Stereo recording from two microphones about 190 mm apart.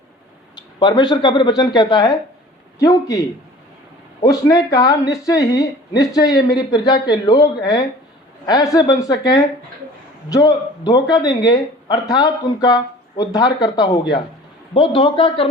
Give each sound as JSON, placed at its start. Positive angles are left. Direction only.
{"t": 0.5, "sound": "a woman's voice", "side_deg": 20}
{"t": 4.2, "sound": "a woman's voice", "side_deg": 15}